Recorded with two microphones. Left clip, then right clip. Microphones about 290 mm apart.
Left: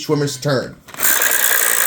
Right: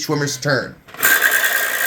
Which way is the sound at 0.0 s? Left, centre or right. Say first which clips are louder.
Left 1 dB; centre.